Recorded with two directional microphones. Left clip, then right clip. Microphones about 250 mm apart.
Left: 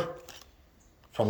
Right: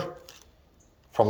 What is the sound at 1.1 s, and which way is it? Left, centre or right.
Speech, centre.